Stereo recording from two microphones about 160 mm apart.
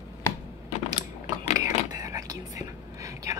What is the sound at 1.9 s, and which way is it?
Whispering, 20° right (ahead or behind).